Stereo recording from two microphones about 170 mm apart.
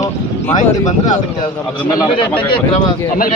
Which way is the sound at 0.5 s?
45° left (ahead or behind).